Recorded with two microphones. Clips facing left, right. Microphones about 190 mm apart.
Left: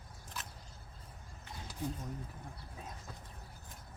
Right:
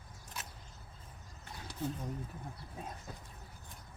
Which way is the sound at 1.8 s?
15° left (ahead or behind).